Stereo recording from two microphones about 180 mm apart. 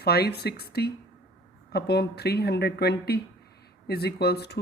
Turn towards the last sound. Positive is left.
turn(degrees=65)  # may be behind; listen again after turning